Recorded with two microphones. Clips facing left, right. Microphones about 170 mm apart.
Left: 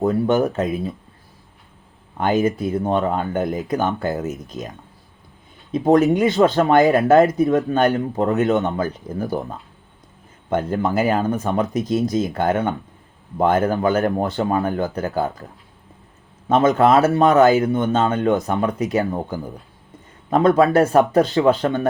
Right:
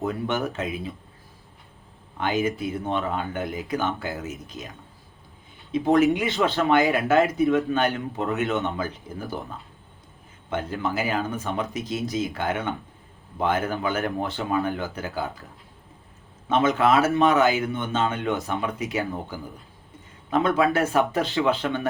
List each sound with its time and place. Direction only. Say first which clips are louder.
0.0 s speech: left 9 dB; 40° left (ahead or behind)
2.1 s speech: left 6 dB; 45° left (ahead or behind)
5.7 s speech: left 4 dB; 40° left (ahead or behind)
16.5 s speech: left 6 dB; 40° left (ahead or behind)